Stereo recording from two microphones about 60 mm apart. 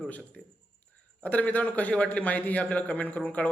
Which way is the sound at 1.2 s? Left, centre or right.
Left.